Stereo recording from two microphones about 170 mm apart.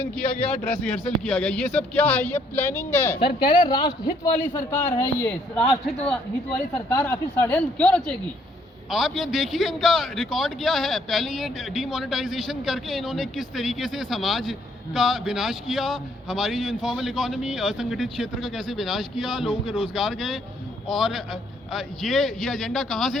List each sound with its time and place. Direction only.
0.0 s speech: 5° left (ahead or behind)
3.2 s speech: 30° left (ahead or behind)
5.5 s a man's voice: 5° left (ahead or behind)